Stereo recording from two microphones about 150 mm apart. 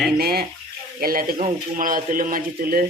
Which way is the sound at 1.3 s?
55° right (ahead or behind).